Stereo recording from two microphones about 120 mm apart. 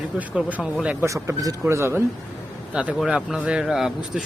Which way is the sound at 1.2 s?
30° right (ahead or behind).